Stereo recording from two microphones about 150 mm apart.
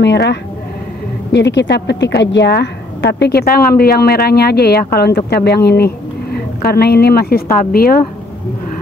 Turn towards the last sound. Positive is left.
turn(degrees=80)